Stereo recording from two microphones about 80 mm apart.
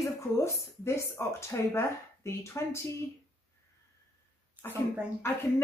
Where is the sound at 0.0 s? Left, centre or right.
Left.